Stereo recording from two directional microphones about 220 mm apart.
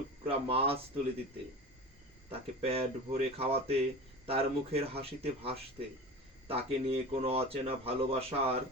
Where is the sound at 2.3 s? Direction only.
25° right (ahead or behind).